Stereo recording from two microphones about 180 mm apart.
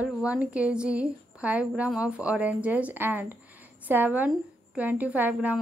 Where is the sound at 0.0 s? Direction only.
5° right (ahead or behind).